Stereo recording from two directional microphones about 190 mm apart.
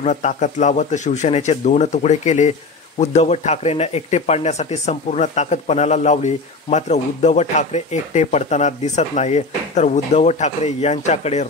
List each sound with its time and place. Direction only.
0.0 s speech: 40° left (ahead or behind)